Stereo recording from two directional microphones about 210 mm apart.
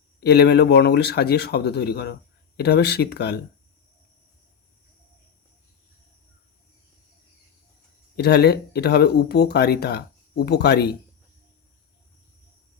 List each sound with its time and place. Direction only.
0.2 s speech: 50° left (ahead or behind)
8.1 s speech: 50° left (ahead or behind)